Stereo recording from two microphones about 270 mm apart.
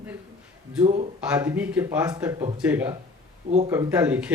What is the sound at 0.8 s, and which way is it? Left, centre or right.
Speech, right.